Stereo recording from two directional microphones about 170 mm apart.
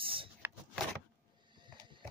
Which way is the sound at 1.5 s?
25° right (ahead or behind).